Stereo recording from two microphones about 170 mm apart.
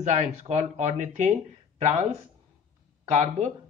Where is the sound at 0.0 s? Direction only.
40° right (ahead or behind).